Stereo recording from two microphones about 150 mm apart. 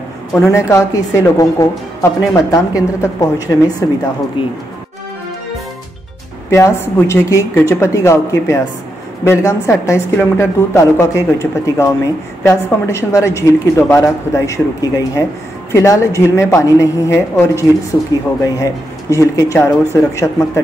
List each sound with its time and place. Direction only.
0.3 s a woman's voice: 20° left (ahead or behind)
4.4 s speech: 35° left (ahead or behind)
6.5 s a woman's voice: 20° left (ahead or behind)